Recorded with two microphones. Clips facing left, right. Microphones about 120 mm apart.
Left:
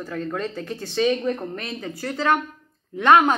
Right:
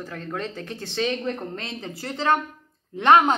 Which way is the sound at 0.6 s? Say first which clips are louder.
Left 6 dB; 20° right (ahead or behind).